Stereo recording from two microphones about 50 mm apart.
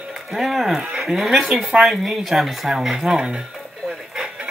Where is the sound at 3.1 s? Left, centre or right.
Centre.